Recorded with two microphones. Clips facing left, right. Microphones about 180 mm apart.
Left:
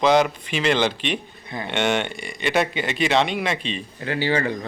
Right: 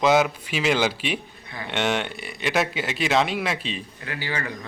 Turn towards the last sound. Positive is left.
turn(degrees=30)  # may be behind; listen again after turning